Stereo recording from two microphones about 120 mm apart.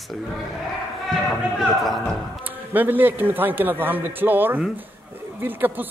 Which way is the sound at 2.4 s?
15° right (ahead or behind).